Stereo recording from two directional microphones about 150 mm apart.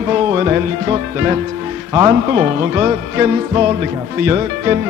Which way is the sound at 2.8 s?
20° right (ahead or behind).